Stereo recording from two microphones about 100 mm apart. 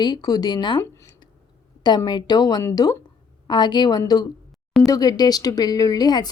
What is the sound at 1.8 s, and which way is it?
Speech, 45° left (ahead or behind).